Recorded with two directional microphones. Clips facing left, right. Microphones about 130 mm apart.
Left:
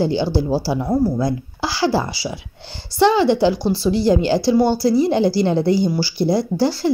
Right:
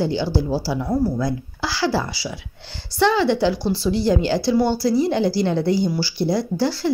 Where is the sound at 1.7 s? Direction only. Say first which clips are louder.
Left 3 dB; 10° left (ahead or behind).